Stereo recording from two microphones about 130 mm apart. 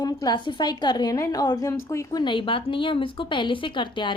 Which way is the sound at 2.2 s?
40° left (ahead or behind).